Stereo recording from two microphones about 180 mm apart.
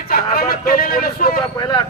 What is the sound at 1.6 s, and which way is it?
Speech, 25° left (ahead or behind).